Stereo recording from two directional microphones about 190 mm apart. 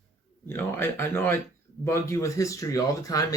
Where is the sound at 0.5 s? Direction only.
10° left (ahead or behind).